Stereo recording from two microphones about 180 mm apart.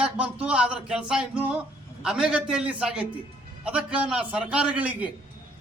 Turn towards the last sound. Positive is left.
turn(degrees=-10)  # may be behind; listen again after turning